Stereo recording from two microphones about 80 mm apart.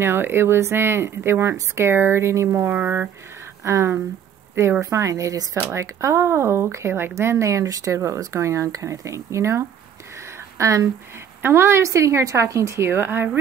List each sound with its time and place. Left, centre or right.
0.0 s speech: right
2.7 s speech: right
3.6 s speech: right
10.2 s a sound: right
11.4 s speech: right